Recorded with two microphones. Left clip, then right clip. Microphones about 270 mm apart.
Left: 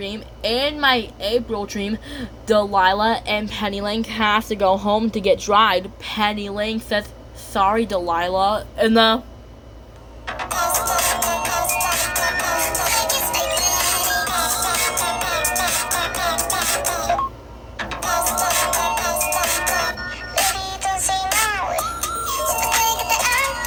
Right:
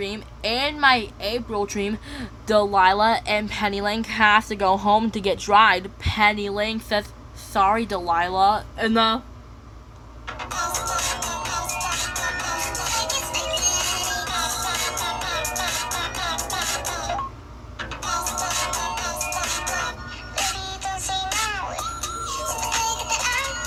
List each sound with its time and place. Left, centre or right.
0.0 s speech: centre
10.2 s music: left